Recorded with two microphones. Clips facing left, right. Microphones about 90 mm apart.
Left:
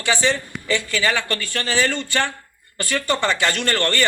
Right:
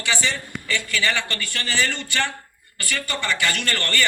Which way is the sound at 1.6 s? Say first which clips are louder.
Left 4 dB; 15° left (ahead or behind).